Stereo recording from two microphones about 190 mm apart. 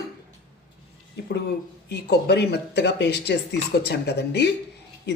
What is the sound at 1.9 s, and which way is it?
Speech, 60° left (ahead or behind).